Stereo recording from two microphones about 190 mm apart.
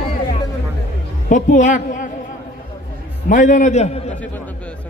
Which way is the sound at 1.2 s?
40° left (ahead or behind).